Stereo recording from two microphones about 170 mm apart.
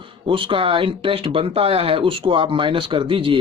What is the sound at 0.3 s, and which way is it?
Speech, 30° right (ahead or behind).